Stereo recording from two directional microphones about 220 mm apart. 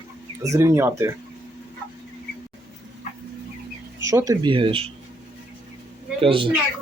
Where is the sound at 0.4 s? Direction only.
15° right (ahead or behind).